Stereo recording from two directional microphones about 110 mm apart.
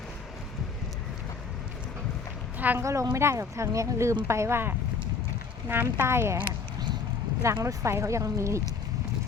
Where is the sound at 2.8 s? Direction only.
25° right (ahead or behind).